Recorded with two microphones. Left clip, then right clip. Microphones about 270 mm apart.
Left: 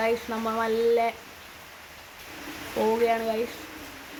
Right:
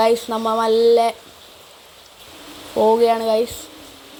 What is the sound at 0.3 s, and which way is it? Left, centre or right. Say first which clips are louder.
Speech: right 9 dB; right.